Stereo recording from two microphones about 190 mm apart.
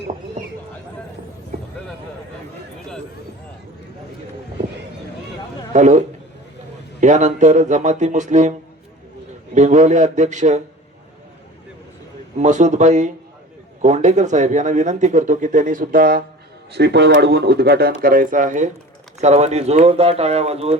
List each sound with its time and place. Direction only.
5.7 s a man's voice: 40° right (ahead or behind)
7.0 s speech: 40° right (ahead or behind)
9.6 s speech: 40° right (ahead or behind)
12.4 s speech: 40° right (ahead or behind)
16.7 s speech: 60° right (ahead or behind); by 20.7 s 35° right (ahead or behind)